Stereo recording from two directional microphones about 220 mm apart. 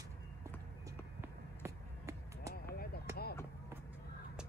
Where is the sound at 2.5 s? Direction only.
45° left (ahead or behind).